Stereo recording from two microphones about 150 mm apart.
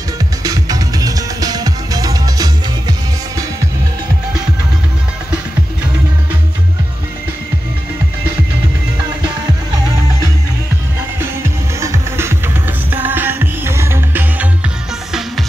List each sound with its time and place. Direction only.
0.4 s music: 25° right (ahead or behind)
11.1 s music: 20° right (ahead or behind)